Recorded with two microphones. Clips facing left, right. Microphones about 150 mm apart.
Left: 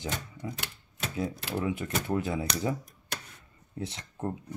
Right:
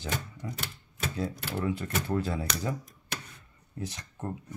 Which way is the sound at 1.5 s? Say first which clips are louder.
Even; 15° left (ahead or behind).